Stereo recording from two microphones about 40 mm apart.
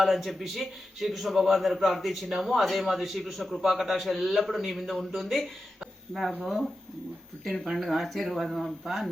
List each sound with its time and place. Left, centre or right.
0.0 s a man's voice: centre